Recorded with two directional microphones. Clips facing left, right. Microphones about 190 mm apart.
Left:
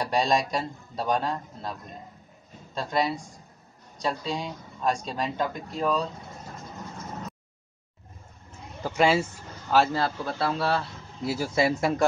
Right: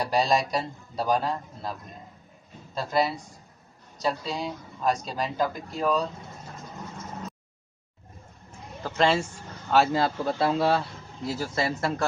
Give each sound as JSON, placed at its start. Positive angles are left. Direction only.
{"t": 0.0, "sound": "speech", "side_deg": 0}
{"t": 8.8, "sound": "speech", "side_deg": 10}
{"t": 9.9, "sound": "speech", "side_deg": -20}
{"t": 11.2, "sound": "speech", "side_deg": 10}